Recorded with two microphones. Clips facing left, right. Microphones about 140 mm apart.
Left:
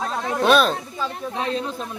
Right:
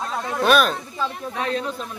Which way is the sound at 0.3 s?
25° left (ahead or behind).